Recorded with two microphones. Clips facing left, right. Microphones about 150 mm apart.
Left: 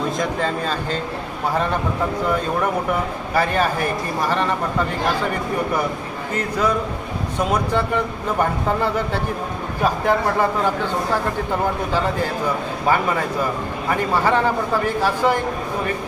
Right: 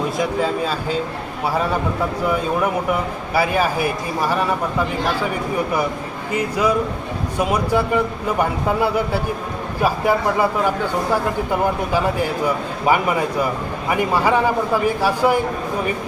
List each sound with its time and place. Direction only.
0.2 s speech: 5° right (ahead or behind)
2.2 s speech: 5° right (ahead or behind)
12.9 s speech: 15° right (ahead or behind)